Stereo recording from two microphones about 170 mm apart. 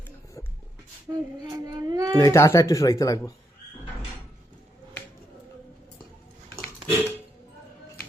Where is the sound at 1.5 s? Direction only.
20° right (ahead or behind).